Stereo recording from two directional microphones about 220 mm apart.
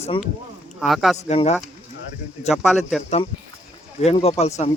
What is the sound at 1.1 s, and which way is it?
Speech, 30° left (ahead or behind).